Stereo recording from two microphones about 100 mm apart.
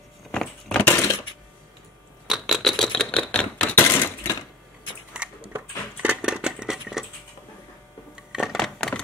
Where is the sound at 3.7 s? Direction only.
20° left (ahead or behind).